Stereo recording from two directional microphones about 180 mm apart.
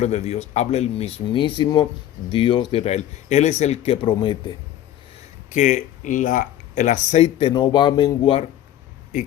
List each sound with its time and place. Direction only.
0.0 s speech: 35° left (ahead or behind)
5.5 s speech: 45° left (ahead or behind); by 8.4 s 30° left (ahead or behind)